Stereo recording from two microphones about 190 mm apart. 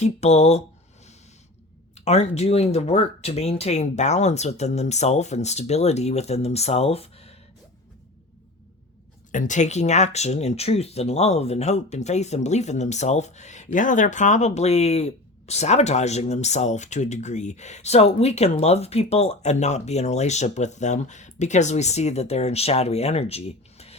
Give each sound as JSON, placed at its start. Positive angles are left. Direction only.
{"t": 0.0, "sound": "speech", "side_deg": 35}
{"t": 2.0, "sound": "speech", "side_deg": 35}
{"t": 9.3, "sound": "speech", "side_deg": 40}